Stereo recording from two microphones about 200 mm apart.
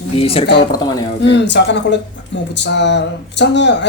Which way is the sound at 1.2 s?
60° left (ahead or behind).